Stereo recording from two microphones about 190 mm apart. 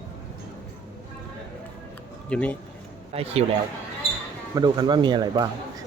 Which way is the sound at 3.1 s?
30° right (ahead or behind).